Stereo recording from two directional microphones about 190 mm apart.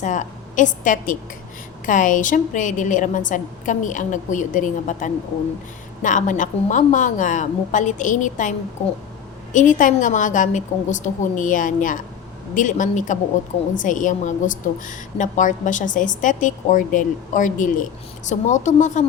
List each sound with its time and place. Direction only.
0.0 s a woman's voice: 40° left (ahead or behind)